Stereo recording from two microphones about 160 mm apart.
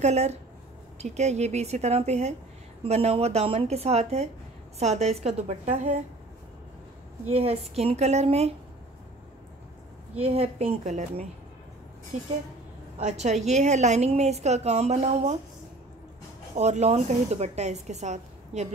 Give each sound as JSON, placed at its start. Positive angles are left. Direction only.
{"t": 0.0, "sound": "a woman's voice", "side_deg": -45}
{"t": 7.2, "sound": "a woman's voice", "side_deg": -40}
{"t": 10.1, "sound": "a woman's voice", "side_deg": -40}
{"t": 13.0, "sound": "a woman's voice", "side_deg": -45}
{"t": 16.5, "sound": "a woman's voice", "side_deg": -45}